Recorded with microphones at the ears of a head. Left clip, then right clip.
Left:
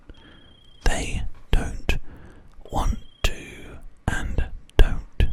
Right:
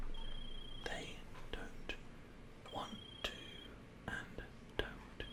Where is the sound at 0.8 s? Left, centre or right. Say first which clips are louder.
Left 18 dB; left.